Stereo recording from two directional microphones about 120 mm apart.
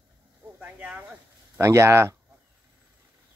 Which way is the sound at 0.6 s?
15° right (ahead or behind).